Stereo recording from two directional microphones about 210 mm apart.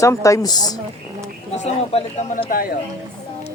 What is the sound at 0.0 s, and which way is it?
Speech, 15° left (ahead or behind).